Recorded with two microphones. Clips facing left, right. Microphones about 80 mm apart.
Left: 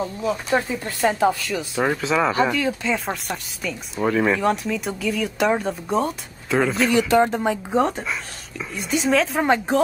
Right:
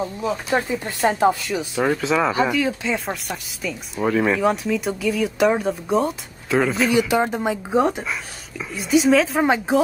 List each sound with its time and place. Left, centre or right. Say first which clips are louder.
0.2 s speech: left 1 dB; centre
1.8 s speech: right 1 dB; centre